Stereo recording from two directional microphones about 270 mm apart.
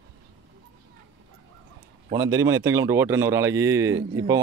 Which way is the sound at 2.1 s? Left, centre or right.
Centre.